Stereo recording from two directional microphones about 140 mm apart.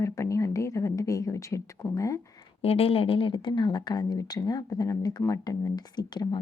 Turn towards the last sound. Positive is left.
turn(degrees=30)  # may be behind; listen again after turning